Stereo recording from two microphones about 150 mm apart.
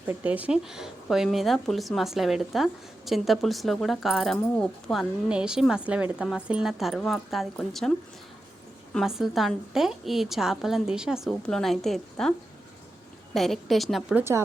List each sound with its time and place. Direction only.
0.1 s a woman's voice: 10° right (ahead or behind)
13.3 s a woman's voice: centre (ahead or behind)
14.2 s speech: 15° right (ahead or behind)